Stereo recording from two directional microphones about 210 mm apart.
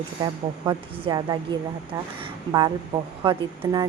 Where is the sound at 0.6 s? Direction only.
20° right (ahead or behind).